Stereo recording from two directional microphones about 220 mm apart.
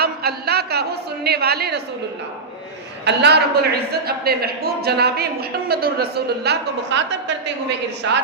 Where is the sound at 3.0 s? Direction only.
50° right (ahead or behind).